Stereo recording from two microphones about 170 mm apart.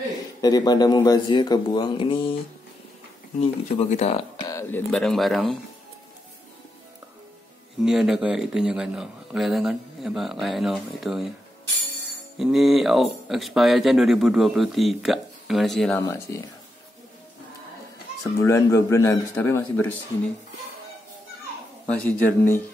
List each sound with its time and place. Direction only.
0.4 s a man's voice: 20° left (ahead or behind)
3.3 s speech: 40° left (ahead or behind)
4.5 s speech: 15° left (ahead or behind)
7.8 s speech: 5° right (ahead or behind)
12.4 s speech: centre (ahead or behind)
16.0 s a man's voice: 15° left (ahead or behind)
18.2 s a man's voice: 20° left (ahead or behind)
22.0 s a man's voice: 10° left (ahead or behind)